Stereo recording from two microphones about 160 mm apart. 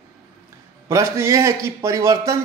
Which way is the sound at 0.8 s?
15° right (ahead or behind).